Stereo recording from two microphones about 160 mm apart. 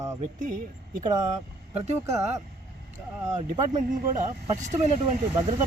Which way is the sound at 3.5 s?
50° right (ahead or behind).